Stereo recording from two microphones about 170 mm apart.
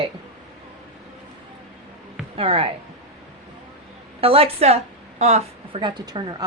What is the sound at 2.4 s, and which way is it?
Speech, 35° right (ahead or behind).